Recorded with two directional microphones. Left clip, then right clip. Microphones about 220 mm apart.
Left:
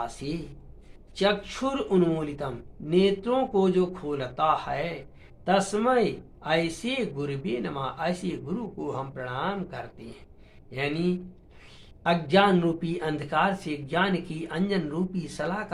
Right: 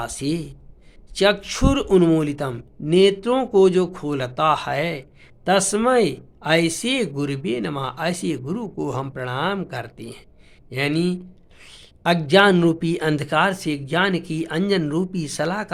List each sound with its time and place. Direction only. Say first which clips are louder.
0.0 s speech: right 7 dB; 50° right (ahead or behind)